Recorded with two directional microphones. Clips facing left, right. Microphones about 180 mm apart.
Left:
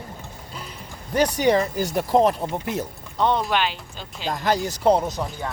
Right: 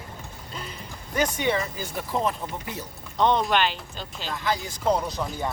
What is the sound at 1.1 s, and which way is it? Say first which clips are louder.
Speech: left 6 dB; 35° left (ahead or behind).